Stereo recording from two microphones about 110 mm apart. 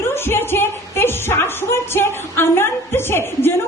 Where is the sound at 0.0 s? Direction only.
20° left (ahead or behind).